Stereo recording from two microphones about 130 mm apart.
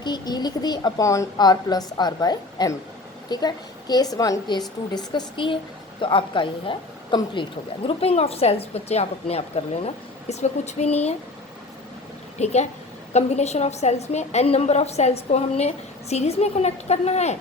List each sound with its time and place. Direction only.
0.0 s speech: 35° left (ahead or behind)
7.9 s a woman's voice: 50° left (ahead or behind)
12.4 s a woman's voice: 55° left (ahead or behind)